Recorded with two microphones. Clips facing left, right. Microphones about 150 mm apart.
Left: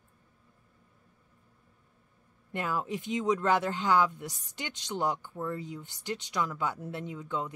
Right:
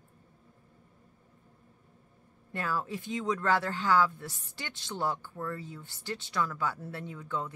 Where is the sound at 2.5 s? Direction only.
20° left (ahead or behind).